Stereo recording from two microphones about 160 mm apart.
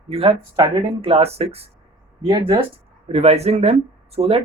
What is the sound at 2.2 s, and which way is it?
Speech, 25° right (ahead or behind).